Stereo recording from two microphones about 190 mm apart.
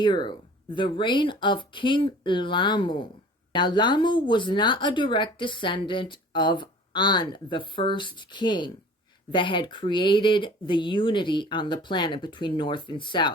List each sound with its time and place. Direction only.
0.0 s a woman's voice: 25° left (ahead or behind)